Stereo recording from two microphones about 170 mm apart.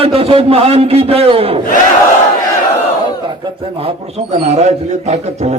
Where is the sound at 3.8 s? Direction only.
35° right (ahead or behind).